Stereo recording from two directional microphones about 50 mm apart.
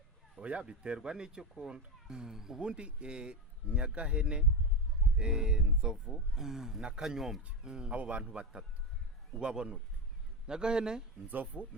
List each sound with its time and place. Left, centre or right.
0.4 s speech: right
2.6 s speech: right
5.1 s speech: centre
11.3 s speech: right